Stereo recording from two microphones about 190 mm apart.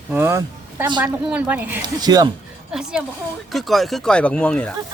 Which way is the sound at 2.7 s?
5° right (ahead or behind).